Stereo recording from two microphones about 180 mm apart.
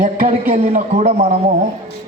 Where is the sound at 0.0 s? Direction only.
50° right (ahead or behind).